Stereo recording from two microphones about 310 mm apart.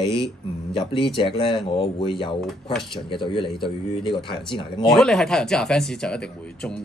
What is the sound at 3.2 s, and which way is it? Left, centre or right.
Speech, centre.